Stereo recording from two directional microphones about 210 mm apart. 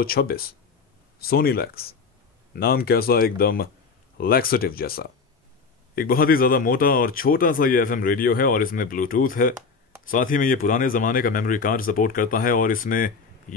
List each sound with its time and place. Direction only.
0.0 s speech: 45° left (ahead or behind)